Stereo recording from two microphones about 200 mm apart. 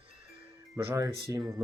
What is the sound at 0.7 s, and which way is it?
Speech, 15° right (ahead or behind).